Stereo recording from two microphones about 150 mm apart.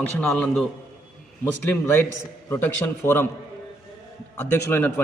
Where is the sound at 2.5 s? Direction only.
15° left (ahead or behind).